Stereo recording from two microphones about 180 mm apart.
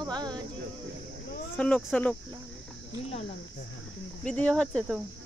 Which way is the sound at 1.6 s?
5° left (ahead or behind).